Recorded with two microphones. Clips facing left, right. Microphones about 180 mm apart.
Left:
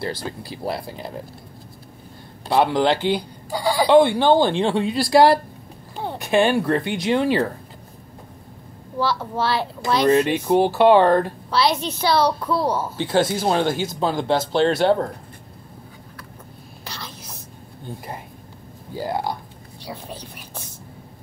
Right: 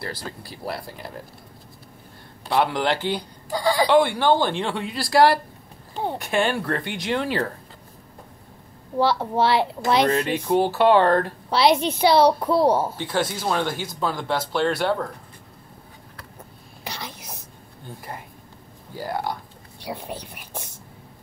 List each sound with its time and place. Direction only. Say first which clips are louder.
0.0 s speech: left 5 dB; 20° left (ahead or behind)
2.4 s speech: left 4 dB; 20° left (ahead or behind)
3.5 s speech: even; 5° left (ahead or behind)
3.9 s speech: left 6 dB; 20° left (ahead or behind)
8.9 s a woman's voice: right 3 dB; 25° right (ahead or behind)
10.0 s speech: left 5 dB; 20° left (ahead or behind)
11.5 s a woman's voice: right 2 dB; 20° right (ahead or behind)
13.0 s speech: left 5 dB; 30° left (ahead or behind)
16.8 s whispering: right 2 dB; 15° right (ahead or behind)
18.9 s speech: left 3 dB; 20° left (ahead or behind)
19.8 s speech: right 2 dB; 20° right (ahead or behind)